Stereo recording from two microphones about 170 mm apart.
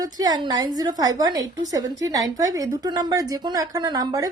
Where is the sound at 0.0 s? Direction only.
20° right (ahead or behind).